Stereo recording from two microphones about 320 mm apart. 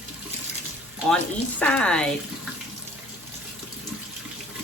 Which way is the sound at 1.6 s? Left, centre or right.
Centre.